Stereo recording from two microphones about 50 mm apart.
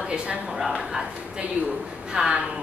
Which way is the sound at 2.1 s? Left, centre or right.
Centre.